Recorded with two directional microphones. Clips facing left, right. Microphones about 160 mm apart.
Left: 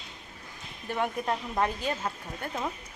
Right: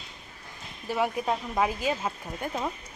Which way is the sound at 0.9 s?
5° right (ahead or behind).